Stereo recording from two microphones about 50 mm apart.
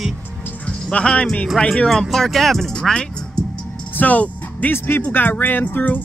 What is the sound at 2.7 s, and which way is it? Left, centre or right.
Speech, centre.